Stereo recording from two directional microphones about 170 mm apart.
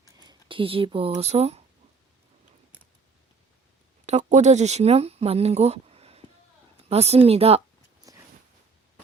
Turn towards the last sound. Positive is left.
turn(degrees=-35)  # may be behind; listen again after turning